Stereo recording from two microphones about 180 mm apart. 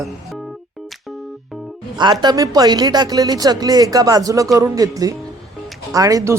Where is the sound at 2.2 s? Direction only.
20° right (ahead or behind).